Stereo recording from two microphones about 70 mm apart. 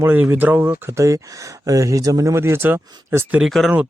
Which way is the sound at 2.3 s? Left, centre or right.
Right.